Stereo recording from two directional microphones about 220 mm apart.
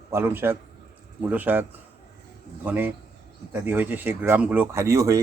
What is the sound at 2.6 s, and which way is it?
Speech, 10° right (ahead or behind).